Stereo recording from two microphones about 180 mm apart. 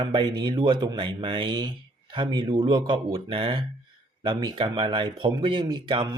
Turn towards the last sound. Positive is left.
turn(degrees=-25)  # may be behind; listen again after turning